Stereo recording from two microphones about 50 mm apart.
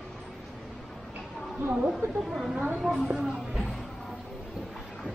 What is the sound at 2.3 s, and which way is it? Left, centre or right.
A woman's voice, centre.